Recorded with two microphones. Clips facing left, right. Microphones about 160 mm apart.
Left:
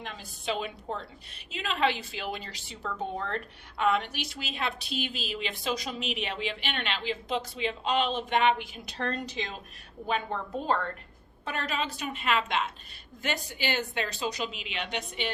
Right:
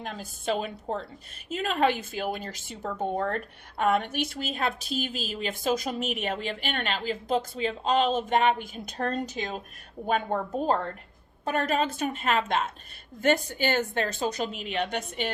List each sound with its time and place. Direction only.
0.0 s a woman's voice: 45° right (ahead or behind)